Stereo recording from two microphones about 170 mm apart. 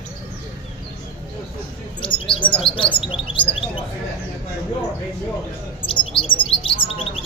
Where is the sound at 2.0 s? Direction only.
30° left (ahead or behind).